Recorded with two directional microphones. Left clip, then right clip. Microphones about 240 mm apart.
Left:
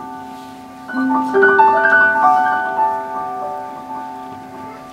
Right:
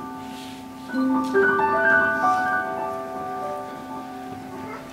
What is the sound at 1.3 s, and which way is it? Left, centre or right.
Music, centre.